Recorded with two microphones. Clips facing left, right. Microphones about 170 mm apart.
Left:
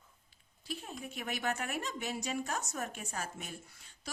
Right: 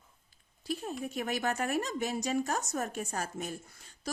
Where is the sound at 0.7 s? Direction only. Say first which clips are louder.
Right 7 dB; 40° right (ahead or behind).